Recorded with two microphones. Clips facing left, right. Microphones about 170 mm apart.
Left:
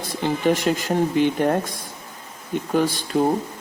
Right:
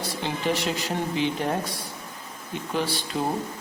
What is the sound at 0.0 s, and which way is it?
Speech, 50° left (ahead or behind).